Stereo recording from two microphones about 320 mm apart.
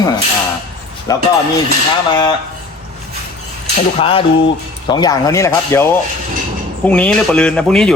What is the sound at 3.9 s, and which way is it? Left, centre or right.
Speech, centre.